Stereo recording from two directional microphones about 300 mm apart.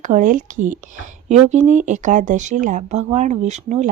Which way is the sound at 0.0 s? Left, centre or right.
Right.